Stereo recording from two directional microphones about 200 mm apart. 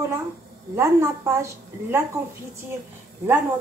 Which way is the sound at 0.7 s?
15° right (ahead or behind).